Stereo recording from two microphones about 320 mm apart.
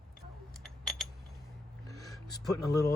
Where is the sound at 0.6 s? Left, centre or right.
Centre.